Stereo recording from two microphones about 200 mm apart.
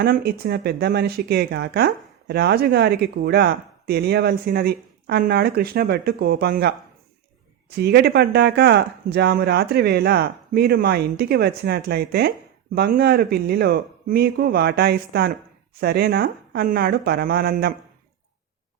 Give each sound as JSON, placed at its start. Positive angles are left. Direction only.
{"t": 0.0, "sound": "speech", "side_deg": -50}
{"t": 7.8, "sound": "speech", "side_deg": -55}